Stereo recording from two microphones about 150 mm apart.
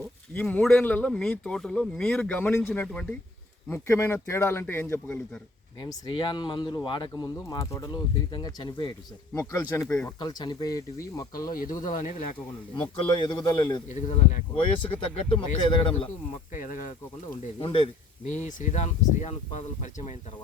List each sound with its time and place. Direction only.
0.3 s speech: 5° left (ahead or behind)
5.8 s speech: 30° left (ahead or behind)
9.6 s speech: 15° left (ahead or behind)
10.2 s speech: 25° left (ahead or behind)
11.5 s speech: 65° left (ahead or behind)
12.7 s speech: 30° left (ahead or behind)
13.9 s speech: 50° left (ahead or behind)
15.3 s speech: 35° left (ahead or behind)
16.5 s speech: 60° left (ahead or behind)
17.6 s speech: 35° left (ahead or behind)
18.3 s speech: 55° left (ahead or behind)